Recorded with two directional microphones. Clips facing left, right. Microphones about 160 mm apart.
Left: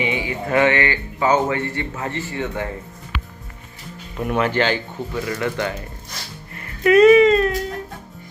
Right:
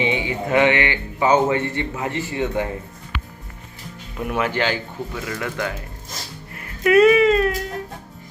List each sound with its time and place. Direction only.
0.0 s speech: 25° right (ahead or behind)
4.2 s speech: 5° right (ahead or behind)
6.8 s speech: 5° right (ahead or behind)